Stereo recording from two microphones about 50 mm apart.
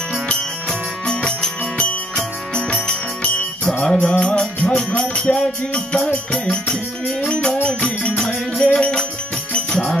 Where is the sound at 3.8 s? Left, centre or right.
Centre.